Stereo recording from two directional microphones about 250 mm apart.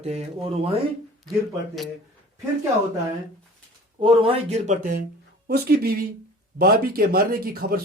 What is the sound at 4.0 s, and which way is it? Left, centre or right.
Speech, right.